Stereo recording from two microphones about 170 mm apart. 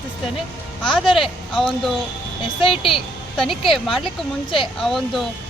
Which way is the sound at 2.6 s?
30° left (ahead or behind).